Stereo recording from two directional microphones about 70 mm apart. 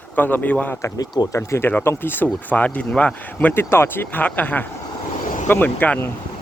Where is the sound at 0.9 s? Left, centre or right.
Left.